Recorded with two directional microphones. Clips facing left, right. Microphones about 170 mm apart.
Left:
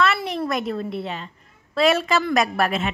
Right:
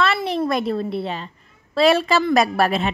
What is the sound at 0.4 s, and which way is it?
A woman's voice, 30° right (ahead or behind).